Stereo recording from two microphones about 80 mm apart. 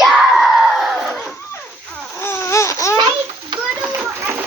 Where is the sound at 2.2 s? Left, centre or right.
Left.